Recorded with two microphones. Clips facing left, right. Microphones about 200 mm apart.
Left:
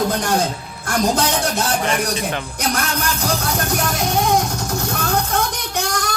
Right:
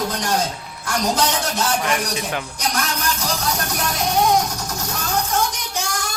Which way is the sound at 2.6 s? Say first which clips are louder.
Left 4 dB; 55° left (ahead or behind).